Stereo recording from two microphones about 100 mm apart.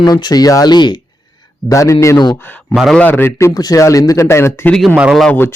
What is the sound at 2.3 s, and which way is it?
Speech, 20° left (ahead or behind).